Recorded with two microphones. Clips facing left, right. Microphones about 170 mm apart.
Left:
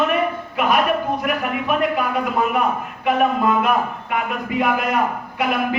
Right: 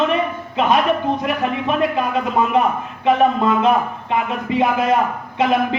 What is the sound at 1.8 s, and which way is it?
Speech, 20° right (ahead or behind).